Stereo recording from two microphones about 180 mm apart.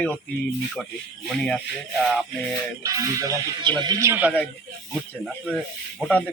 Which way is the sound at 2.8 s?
20° right (ahead or behind).